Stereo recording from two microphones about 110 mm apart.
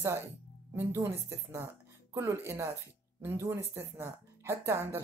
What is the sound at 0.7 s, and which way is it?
Speech, 25° right (ahead or behind).